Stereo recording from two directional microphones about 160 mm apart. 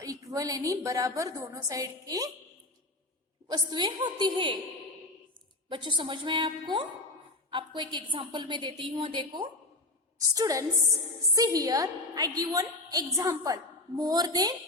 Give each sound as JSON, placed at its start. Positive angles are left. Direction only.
{"t": 0.0, "sound": "a woman's voice", "side_deg": -20}
{"t": 3.5, "sound": "a woman's voice", "side_deg": -25}
{"t": 5.6, "sound": "a woman's voice", "side_deg": -30}